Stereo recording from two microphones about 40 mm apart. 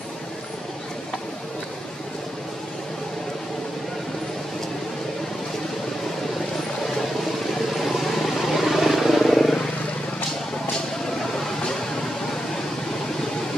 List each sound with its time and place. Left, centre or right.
7.7 s vehicle: centre